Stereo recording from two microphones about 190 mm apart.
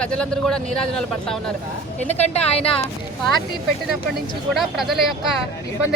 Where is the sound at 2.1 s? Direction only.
35° left (ahead or behind).